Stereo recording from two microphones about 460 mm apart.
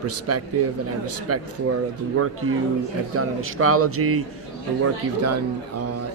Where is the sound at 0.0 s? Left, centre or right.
Right.